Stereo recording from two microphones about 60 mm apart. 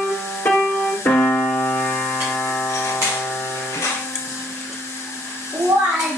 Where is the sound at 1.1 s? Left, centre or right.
Left.